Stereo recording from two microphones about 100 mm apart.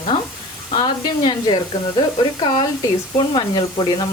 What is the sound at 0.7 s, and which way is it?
Speech, 45° left (ahead or behind).